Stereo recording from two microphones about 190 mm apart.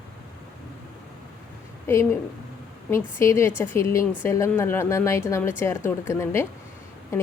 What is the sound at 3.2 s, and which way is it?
A woman's voice, 15° left (ahead or behind).